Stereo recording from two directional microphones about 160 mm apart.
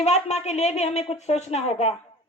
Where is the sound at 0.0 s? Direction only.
45° left (ahead or behind).